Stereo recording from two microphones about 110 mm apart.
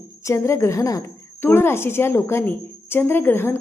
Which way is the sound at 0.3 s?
25° left (ahead or behind).